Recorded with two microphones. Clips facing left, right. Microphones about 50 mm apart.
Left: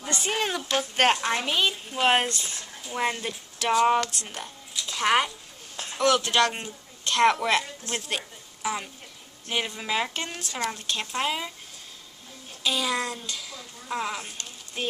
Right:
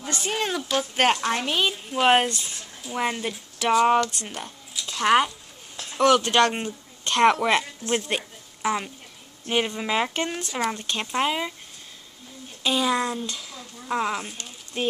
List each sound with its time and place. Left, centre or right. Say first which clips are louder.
0.0 s speech: right 1 dB; centre
4.3 s a sound: right 2 dB; centre
4.9 s speech: right 3 dB; centre
5.9 s speech: right 4 dB; centre
6.2 s a woman's voice: right 3 dB; right
9.8 s speech: right 4 dB; centre
12.6 s speech: right 4 dB; centre